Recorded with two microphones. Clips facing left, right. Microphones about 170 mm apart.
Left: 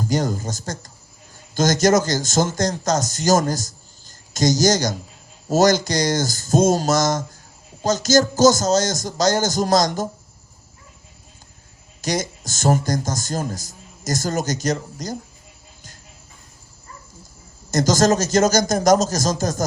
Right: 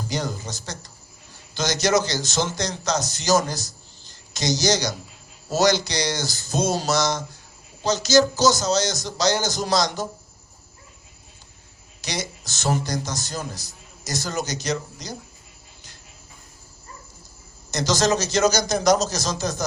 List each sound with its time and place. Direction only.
0.0 s a man's voice: 45° left (ahead or behind)
12.0 s a man's voice: 45° left (ahead or behind)
17.7 s a man's voice: 45° left (ahead or behind)